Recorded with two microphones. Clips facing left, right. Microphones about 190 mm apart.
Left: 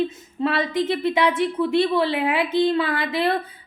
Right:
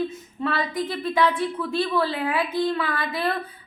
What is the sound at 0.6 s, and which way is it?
Speech, 80° left.